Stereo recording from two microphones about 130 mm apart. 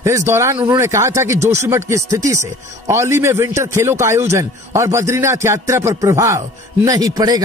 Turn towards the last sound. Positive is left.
turn(degrees=-30)  # may be behind; listen again after turning